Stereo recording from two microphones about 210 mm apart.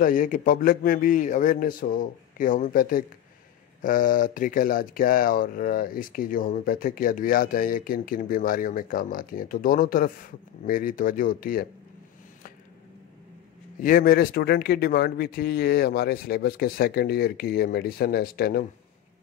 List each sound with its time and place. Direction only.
0.0 s speech: 40° left (ahead or behind)
13.8 s speech: 45° left (ahead or behind)